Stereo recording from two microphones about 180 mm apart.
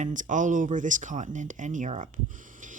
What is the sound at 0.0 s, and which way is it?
Speech, 45° right (ahead or behind).